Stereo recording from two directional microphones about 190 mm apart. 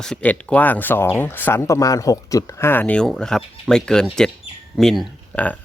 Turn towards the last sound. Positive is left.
turn(degrees=5)  # may be behind; listen again after turning